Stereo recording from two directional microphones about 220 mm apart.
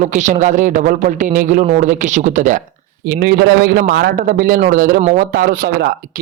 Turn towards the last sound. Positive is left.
turn(degrees=-40)  # may be behind; listen again after turning